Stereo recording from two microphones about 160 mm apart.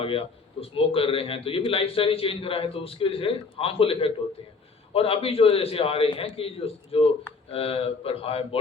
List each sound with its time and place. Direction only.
0.0 s a man's voice: 35° left (ahead or behind)